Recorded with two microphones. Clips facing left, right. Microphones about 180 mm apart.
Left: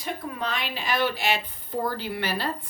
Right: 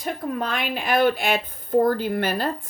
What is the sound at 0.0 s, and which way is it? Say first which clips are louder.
A woman's voice: right 5 dB; 50° right (ahead or behind).